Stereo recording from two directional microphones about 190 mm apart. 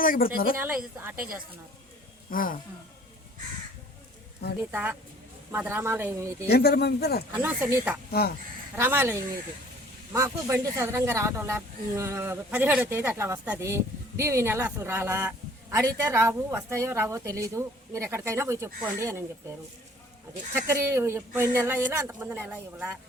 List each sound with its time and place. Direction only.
0.0 s speech: 50° left (ahead or behind)
0.5 s speech: 5° right (ahead or behind)
1.1 s a woman's voice: 50° right (ahead or behind)
2.3 s speech: 50° left (ahead or behind)
4.7 s speech: 10° right (ahead or behind)
6.5 s speech: 55° left (ahead or behind)
7.3 s speech: 10° right (ahead or behind)
8.2 s speech: 55° left (ahead or behind)
8.7 s speech: 10° right (ahead or behind)
20.7 s speech: 10° right (ahead or behind)